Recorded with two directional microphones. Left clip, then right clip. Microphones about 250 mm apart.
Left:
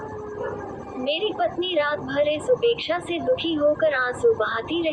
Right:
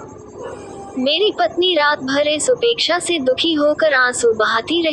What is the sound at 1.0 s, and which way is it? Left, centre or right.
A woman's voice, right.